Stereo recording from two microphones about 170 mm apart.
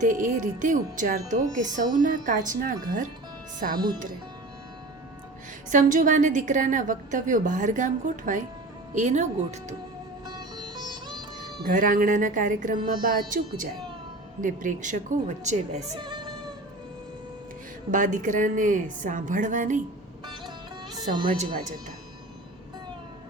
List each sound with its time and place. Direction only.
0.0 s speech: 50° right (ahead or behind)
5.7 s speech: 50° right (ahead or behind)
10.2 s sitar: 25° right (ahead or behind)
11.7 s speech: 55° right (ahead or behind)
14.4 s speech: 50° right (ahead or behind)
16.0 s speech: 25° right (ahead or behind)
17.9 s speech: 50° right (ahead or behind)
21.1 s speech: 50° right (ahead or behind)